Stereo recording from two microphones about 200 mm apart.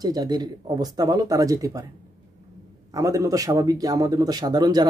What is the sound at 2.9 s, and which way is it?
Speech, 15° right (ahead or behind).